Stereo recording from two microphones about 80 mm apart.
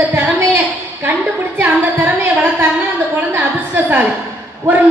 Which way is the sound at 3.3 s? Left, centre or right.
Right.